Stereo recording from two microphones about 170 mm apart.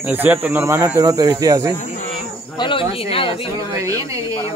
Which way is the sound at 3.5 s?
20° right (ahead or behind).